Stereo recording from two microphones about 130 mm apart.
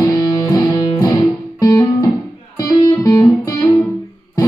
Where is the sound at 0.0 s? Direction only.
30° left (ahead or behind).